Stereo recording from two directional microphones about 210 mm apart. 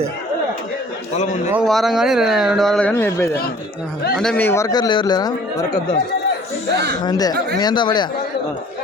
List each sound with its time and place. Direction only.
1.1 s a man's voice: 30° left (ahead or behind)
1.6 s a man's voice: centre (ahead or behind); by 5.3 s 20° left (ahead or behind)
7.0 s speech: 20° left (ahead or behind)